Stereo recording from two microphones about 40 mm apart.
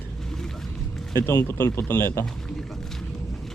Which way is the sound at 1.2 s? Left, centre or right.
Left.